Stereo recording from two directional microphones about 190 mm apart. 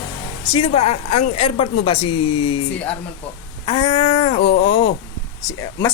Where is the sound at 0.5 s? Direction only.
30° left (ahead or behind).